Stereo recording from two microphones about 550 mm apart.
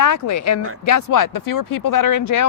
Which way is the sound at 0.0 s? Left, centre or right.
Left.